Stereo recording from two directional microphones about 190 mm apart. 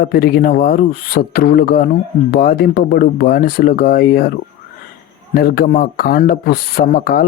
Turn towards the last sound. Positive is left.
turn(degrees=50)  # may be behind; listen again after turning